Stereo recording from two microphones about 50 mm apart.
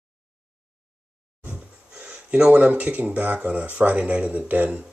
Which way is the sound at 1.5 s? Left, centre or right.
Right.